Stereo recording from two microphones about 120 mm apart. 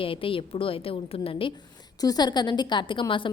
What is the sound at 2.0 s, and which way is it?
A woman's voice, 35° left (ahead or behind).